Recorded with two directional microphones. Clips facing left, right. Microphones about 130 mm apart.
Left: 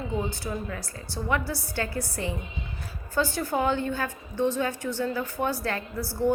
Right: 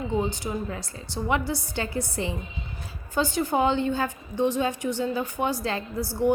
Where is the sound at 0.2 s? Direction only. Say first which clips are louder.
Right 3 dB; 20° right (ahead or behind).